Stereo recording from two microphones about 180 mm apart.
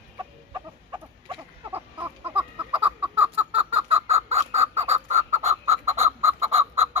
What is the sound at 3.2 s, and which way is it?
Chicken, 30° right (ahead or behind).